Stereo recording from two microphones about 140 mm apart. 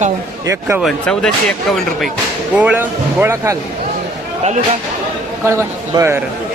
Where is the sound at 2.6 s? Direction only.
10° right (ahead or behind).